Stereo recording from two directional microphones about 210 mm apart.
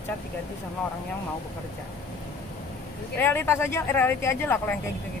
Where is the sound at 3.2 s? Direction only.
10° left (ahead or behind).